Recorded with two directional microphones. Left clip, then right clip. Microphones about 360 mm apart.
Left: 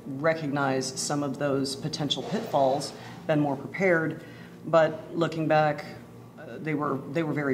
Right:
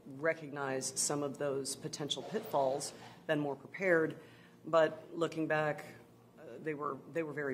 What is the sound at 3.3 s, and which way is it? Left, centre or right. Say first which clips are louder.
Speech: left 9 dB; right.